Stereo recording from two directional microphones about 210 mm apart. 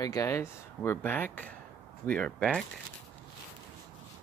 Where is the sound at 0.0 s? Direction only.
15° left (ahead or behind).